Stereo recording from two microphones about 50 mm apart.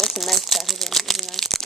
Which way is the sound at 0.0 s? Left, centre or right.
Centre.